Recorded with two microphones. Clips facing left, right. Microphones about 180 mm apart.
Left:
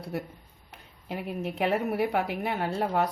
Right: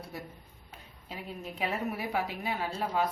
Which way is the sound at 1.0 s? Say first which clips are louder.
Left 8 dB; 65° left (ahead or behind).